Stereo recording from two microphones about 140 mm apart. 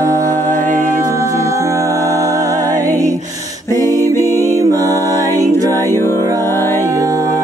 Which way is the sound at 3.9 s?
20° left (ahead or behind).